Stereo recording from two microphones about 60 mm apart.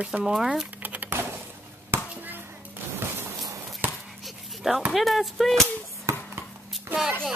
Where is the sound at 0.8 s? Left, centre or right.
Right.